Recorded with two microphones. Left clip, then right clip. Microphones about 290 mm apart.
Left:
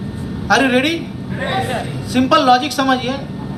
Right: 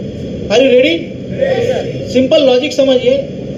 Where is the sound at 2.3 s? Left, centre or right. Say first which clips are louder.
Right 2 dB; left.